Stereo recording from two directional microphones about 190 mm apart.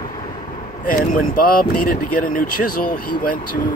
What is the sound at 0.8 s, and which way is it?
Speech, 50° left (ahead or behind).